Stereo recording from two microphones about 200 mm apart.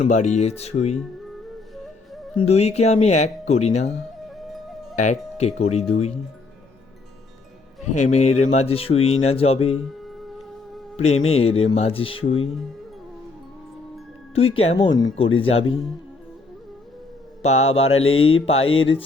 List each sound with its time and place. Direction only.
0.0 s speech: 35° left (ahead or behind)
2.5 s speech: 30° left (ahead or behind)
4.9 s speech: 35° left (ahead or behind)
7.8 s speech: 35° left (ahead or behind)
11.0 s speech: 30° left (ahead or behind)
14.5 s mantra: 30° left (ahead or behind)
17.4 s mantra: 30° left (ahead or behind)